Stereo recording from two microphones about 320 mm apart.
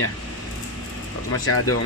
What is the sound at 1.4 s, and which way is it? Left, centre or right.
Speech, left.